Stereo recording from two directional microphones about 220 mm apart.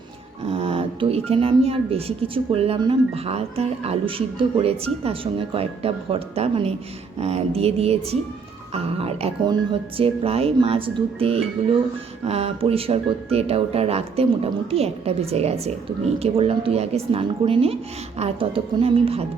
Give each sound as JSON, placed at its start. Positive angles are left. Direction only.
{"t": 0.4, "sound": "speech", "side_deg": -25}